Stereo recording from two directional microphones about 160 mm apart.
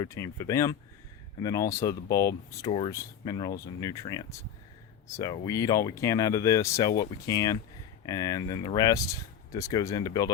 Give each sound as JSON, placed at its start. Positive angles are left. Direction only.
{"t": 0.0, "sound": "speech", "side_deg": 20}